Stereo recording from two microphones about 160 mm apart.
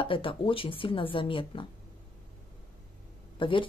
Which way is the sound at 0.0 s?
35° left (ahead or behind).